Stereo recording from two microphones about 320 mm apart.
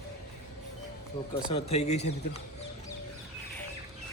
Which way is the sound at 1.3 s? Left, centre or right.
Centre.